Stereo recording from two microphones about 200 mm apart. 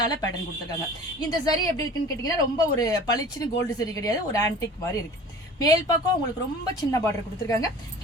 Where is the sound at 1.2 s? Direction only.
20° left (ahead or behind).